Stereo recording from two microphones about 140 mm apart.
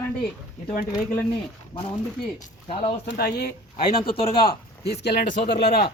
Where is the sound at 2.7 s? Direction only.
50° left (ahead or behind).